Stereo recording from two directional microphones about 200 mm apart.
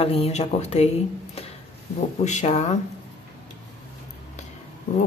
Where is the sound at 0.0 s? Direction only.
30° left (ahead or behind).